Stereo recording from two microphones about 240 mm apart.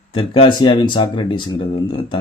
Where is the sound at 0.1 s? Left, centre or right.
Left.